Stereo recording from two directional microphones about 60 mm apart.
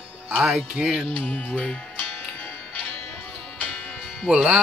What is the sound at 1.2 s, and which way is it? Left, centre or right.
Music, centre.